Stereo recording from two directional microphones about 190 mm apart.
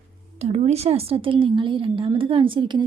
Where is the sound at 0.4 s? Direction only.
35° right (ahead or behind).